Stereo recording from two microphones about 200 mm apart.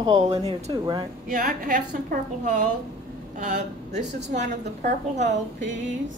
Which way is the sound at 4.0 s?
60° right (ahead or behind).